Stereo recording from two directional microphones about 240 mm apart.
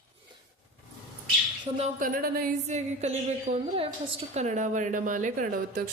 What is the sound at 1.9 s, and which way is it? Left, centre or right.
A woman's voice, right.